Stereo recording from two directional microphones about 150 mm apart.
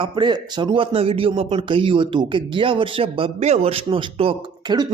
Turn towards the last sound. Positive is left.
turn(degrees=-35)  # may be behind; listen again after turning